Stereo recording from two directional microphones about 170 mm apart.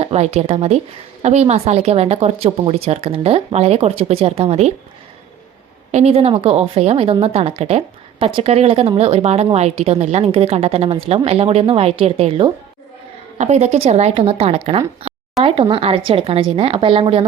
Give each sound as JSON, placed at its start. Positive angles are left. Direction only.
{"t": 0.0, "sound": "speech", "side_deg": -35}
{"t": 5.9, "sound": "speech", "side_deg": -40}